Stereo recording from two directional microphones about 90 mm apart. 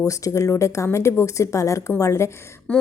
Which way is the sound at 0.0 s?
35° left (ahead or behind).